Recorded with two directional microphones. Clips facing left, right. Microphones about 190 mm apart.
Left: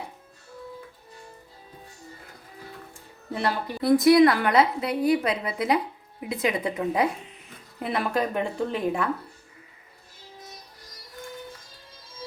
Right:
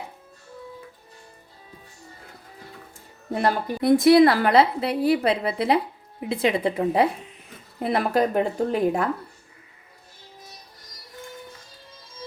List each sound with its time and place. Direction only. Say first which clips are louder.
3.8 s a woman's voice: right 2 dB; 25° right (ahead or behind); by 9.0 s 40° right (ahead or behind)